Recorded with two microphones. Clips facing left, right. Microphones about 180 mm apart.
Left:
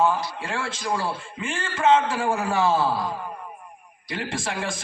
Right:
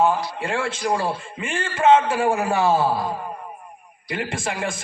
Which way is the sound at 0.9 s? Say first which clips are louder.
Right 3 dB; 15° right (ahead or behind).